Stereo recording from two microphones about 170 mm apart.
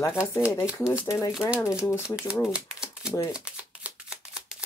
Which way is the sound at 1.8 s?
15° left (ahead or behind).